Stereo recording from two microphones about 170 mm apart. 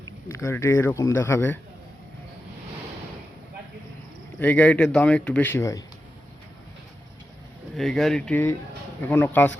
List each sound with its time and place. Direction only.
0.3 s speech: 15° left (ahead or behind)
4.4 s speech: 10° left (ahead or behind)
7.8 s speech: centre (ahead or behind)